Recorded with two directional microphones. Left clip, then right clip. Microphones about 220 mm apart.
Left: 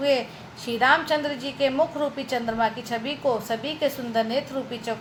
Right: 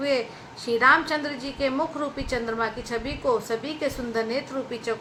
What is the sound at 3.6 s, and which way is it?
Speech, 15° right (ahead or behind).